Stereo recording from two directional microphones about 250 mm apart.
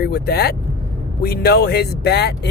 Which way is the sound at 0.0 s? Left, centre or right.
Left.